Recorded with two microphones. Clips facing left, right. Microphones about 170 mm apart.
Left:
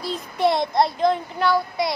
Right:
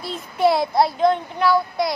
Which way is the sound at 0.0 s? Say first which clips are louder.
Right 2 dB; centre (ahead or behind).